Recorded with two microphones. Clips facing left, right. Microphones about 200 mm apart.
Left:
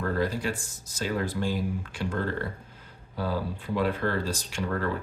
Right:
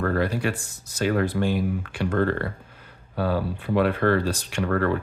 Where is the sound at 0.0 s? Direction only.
65° right (ahead or behind).